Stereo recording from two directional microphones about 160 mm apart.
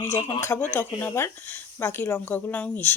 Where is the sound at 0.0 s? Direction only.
15° left (ahead or behind).